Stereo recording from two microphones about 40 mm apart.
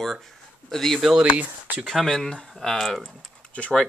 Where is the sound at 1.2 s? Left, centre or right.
Right.